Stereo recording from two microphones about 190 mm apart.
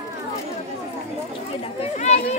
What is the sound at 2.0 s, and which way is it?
Speech, 35° left (ahead or behind).